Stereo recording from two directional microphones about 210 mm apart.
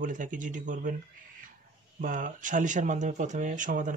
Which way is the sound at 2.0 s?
40° right (ahead or behind).